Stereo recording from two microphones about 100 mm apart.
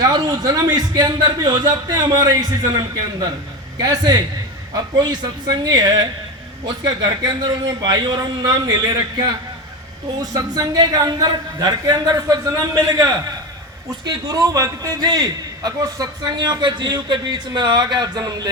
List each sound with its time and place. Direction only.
0.0 s a man's voice: 40° right (ahead or behind)